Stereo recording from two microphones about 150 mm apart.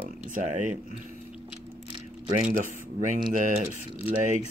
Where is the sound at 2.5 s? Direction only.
60° right (ahead or behind).